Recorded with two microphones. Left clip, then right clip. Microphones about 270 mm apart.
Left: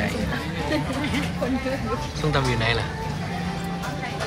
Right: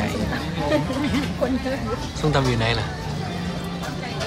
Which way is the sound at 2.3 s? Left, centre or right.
Centre.